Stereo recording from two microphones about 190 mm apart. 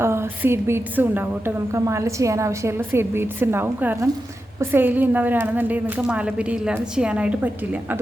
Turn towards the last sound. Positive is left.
turn(degrees=-10)  # may be behind; listen again after turning